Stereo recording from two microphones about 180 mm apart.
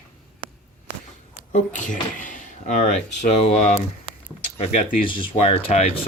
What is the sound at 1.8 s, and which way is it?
Speech, 45° left (ahead or behind).